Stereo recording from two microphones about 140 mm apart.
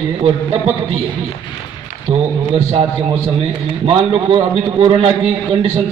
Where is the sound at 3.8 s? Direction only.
40° right (ahead or behind).